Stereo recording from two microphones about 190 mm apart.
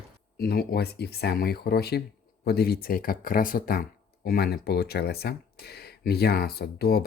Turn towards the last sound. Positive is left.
turn(degrees=55)  # may be behind; listen again after turning